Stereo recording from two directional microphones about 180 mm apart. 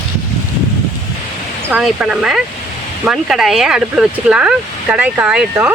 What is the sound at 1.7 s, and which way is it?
Speech, 5° right (ahead or behind).